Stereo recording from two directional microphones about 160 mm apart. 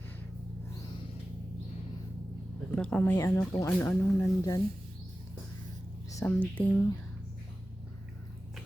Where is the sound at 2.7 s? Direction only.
5° left (ahead or behind).